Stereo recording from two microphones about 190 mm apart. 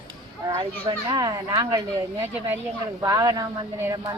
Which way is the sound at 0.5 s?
20° right (ahead or behind).